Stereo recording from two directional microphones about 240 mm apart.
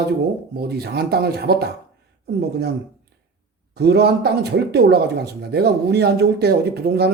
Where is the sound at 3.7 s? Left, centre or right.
Right.